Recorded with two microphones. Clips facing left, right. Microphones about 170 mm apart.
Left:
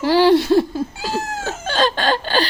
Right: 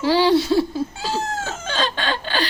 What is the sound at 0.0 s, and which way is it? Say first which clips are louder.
Laughter: left 3 dB; 50° left (ahead or behind).